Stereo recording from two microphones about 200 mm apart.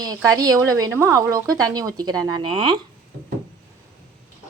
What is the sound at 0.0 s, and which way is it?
A woman's voice, 15° right (ahead or behind).